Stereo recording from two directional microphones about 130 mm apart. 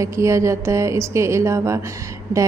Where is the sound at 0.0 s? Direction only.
25° right (ahead or behind).